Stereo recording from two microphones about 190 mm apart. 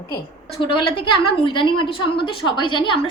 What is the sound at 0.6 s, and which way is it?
A woman's voice, 25° left (ahead or behind).